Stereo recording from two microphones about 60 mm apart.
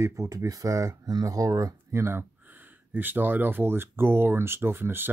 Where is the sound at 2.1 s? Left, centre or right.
Right.